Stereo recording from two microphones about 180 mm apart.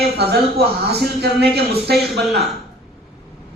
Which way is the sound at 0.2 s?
65° right (ahead or behind).